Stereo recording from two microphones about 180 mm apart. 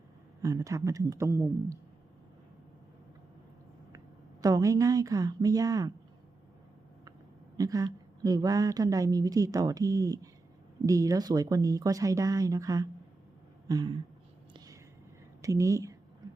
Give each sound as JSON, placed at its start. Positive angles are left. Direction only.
{"t": 0.4, "sound": "a woman's voice", "side_deg": -20}
{"t": 3.9, "sound": "a woman's voice", "side_deg": -20}
{"t": 7.5, "sound": "a woman's voice", "side_deg": -20}
{"t": 14.5, "sound": "whispering", "side_deg": -20}
{"t": 15.4, "sound": "a woman's voice", "side_deg": -15}